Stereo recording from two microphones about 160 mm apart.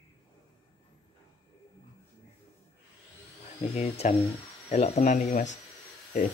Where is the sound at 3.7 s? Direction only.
45° left (ahead or behind).